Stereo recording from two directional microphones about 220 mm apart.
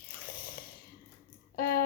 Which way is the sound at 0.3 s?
40° left (ahead or behind).